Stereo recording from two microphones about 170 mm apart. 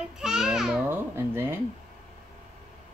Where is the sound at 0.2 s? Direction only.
5° right (ahead or behind).